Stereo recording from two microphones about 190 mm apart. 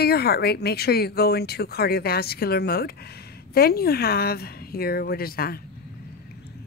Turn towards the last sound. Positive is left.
turn(degrees=50)  # may be behind; listen again after turning